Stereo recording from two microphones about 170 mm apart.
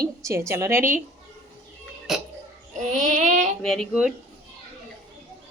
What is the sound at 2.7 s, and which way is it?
Child singing, 45° right (ahead or behind).